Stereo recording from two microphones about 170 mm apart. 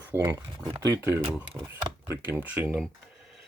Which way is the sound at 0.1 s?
20° right (ahead or behind).